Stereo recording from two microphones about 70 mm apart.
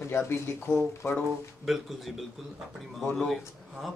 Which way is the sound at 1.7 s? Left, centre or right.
Centre.